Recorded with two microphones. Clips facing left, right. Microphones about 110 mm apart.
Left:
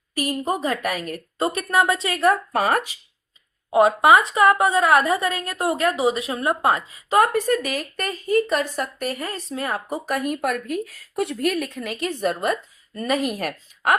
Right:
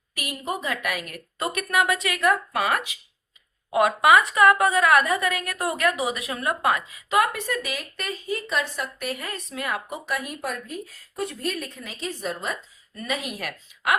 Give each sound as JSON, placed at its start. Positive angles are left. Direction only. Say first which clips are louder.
{"t": 0.1, "sound": "a woman's voice", "louder": "left 7 dB", "side_deg": 35}
{"t": 3.7, "sound": "a woman's voice", "louder": "left 3 dB", "side_deg": 25}
{"t": 13.0, "sound": "speech", "louder": "left 7 dB", "side_deg": 45}